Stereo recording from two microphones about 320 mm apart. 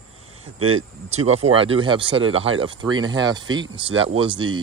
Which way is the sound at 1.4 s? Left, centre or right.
Centre.